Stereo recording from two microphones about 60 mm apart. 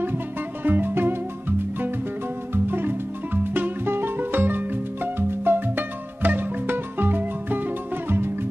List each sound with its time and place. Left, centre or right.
0.7 s music: right
2.5 s music: right